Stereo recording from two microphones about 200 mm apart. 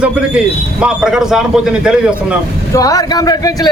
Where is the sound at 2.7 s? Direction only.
15° left (ahead or behind).